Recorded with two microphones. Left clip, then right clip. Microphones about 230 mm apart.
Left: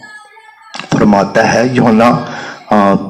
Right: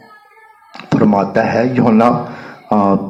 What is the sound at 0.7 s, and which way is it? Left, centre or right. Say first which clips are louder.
A man's voice: left 3 dB; left.